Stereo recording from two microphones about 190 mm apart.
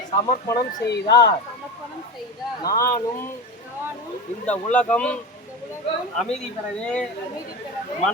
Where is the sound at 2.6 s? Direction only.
15° left (ahead or behind).